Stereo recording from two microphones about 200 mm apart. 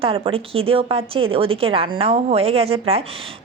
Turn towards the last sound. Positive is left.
turn(degrees=-30)  # may be behind; listen again after turning